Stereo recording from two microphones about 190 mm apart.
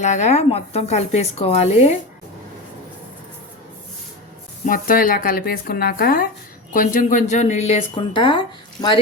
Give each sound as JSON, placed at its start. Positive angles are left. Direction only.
{"t": 0.0, "sound": "speech", "side_deg": 40}
{"t": 4.6, "sound": "speech", "side_deg": 45}